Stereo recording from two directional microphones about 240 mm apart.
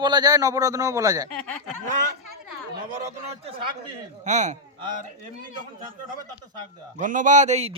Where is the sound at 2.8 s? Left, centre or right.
Right.